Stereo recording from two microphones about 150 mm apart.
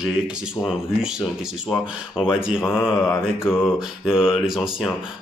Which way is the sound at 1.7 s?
Centre (ahead or behind).